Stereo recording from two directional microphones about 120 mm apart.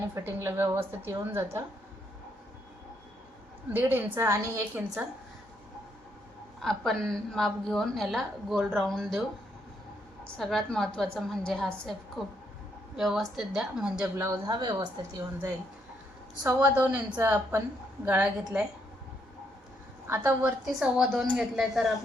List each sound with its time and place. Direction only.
0.1 s a woman's voice: 20° right (ahead or behind)
3.7 s a woman's voice: 15° right (ahead or behind)
6.6 s a woman's voice: 5° left (ahead or behind)
10.3 s a woman's voice: 5° left (ahead or behind)
13.0 s a woman's voice: centre (ahead or behind)
14.2 s speech: 35° right (ahead or behind)
16.4 s a woman's voice: 20° right (ahead or behind)
20.1 s a woman's voice: 15° right (ahead or behind)
20.7 s a woman's voice: 5° right (ahead or behind)